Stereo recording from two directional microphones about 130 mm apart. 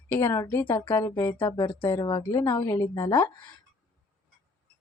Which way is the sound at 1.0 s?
20° left (ahead or behind).